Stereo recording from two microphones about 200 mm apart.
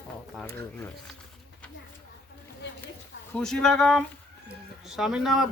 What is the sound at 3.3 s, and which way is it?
Speech, 5° left (ahead or behind).